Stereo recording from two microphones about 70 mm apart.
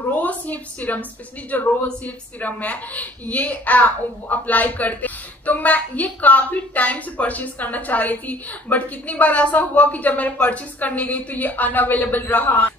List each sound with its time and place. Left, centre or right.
0.1 s a woman's voice: left